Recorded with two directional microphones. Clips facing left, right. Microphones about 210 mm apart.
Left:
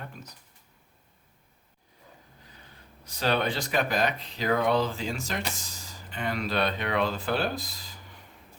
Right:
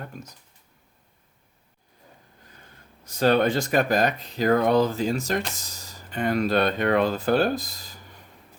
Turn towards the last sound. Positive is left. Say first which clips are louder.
# right 7 dB
turn(degrees=-45)  # may be behind; listen again after turning